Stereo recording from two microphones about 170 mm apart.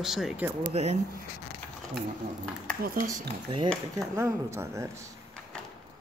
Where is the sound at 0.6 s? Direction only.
40° right (ahead or behind).